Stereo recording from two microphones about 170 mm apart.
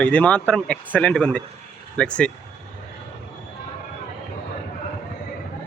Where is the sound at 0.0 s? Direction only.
10° left (ahead or behind).